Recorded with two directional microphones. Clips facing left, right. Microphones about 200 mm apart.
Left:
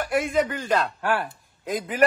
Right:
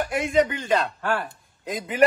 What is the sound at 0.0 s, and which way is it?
A man's voice, centre (ahead or behind).